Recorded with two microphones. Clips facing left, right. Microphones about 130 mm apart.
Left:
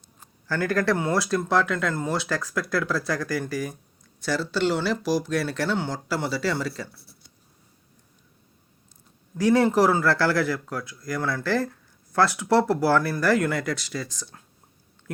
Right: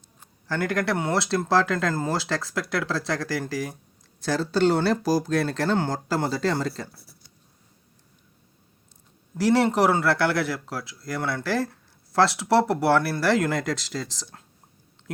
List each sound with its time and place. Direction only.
0.4 s speech: 20° right (ahead or behind)
4.4 s speech: 45° right (ahead or behind)
9.5 s speech: 25° right (ahead or behind)